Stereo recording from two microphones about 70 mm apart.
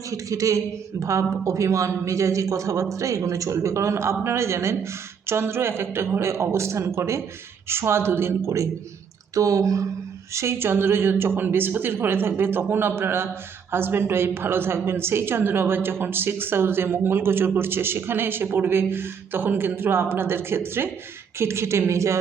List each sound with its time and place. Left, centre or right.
0.1 s a woman's voice: right
10.3 s a woman's voice: right